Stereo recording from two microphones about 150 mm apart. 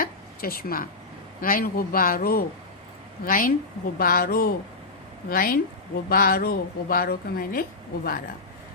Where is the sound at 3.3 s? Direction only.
70° left (ahead or behind).